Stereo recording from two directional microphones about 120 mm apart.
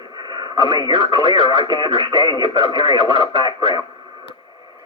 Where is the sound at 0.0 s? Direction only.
35° right (ahead or behind).